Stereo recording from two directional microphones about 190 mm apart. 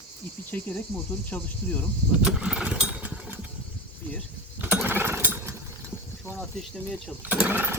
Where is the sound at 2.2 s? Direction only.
5° right (ahead or behind).